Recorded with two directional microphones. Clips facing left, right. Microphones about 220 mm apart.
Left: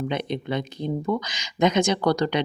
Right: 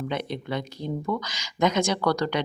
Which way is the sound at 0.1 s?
20° left (ahead or behind).